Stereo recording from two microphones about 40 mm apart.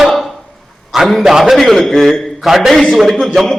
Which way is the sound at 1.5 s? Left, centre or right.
Centre.